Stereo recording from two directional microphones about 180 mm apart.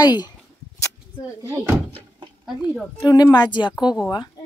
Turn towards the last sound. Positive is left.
turn(degrees=25)  # may be behind; listen again after turning